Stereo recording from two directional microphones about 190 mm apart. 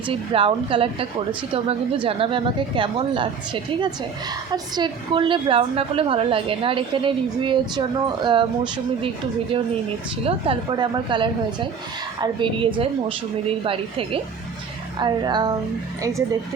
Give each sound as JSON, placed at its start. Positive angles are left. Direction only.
{"t": 0.1, "sound": "a woman's voice", "side_deg": -30}
{"t": 10.2, "sound": "a woman's voice", "side_deg": -30}